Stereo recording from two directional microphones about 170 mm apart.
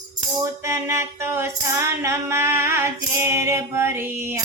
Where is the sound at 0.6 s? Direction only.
15° right (ahead or behind).